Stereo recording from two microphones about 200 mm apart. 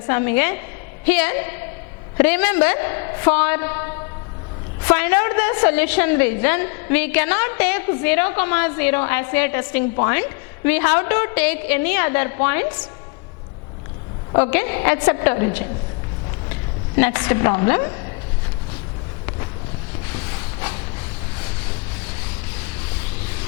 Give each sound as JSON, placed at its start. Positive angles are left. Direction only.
{"t": 0.1, "sound": "a woman's voice", "side_deg": 15}
{"t": 14.3, "sound": "a woman's voice", "side_deg": 10}
{"t": 20.1, "sound": "a sound", "side_deg": 15}